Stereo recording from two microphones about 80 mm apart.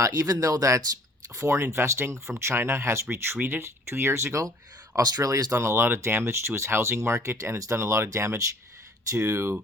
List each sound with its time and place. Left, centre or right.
0.0 s speech: right
1.4 s speech: right
4.9 s speech: right